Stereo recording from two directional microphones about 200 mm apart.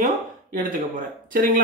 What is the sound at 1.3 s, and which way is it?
Speech, 45° right (ahead or behind).